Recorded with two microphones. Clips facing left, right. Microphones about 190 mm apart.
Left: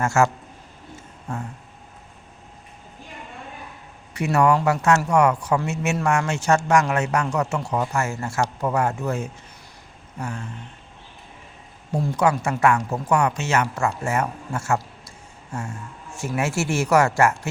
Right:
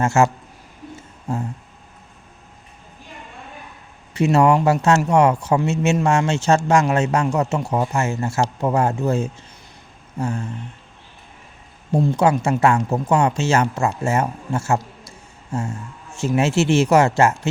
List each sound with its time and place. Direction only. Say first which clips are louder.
0.0 s speech: right 3 dB; 20° right (ahead or behind)
1.3 s speech: right 6 dB; 25° right (ahead or behind)
4.1 s speech: right 4 dB; 25° right (ahead or behind)
11.9 s speech: right 4 dB; 25° right (ahead or behind)
16.1 s speech: right 6 dB; 25° right (ahead or behind)